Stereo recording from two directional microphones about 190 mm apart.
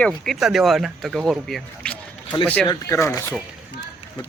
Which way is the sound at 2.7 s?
15° left (ahead or behind).